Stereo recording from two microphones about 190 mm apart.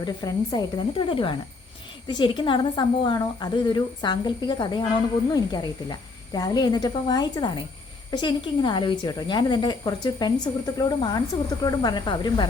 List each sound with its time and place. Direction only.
0.0 s a woman's voice: 20° left (ahead or behind)